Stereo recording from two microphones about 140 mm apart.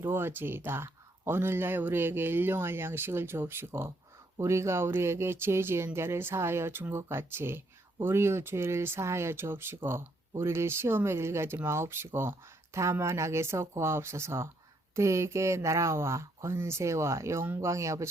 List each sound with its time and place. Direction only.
0.0 s speech: 15° right (ahead or behind)